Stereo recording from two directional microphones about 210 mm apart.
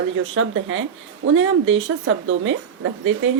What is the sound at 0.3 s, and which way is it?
Speech, 65° right (ahead or behind).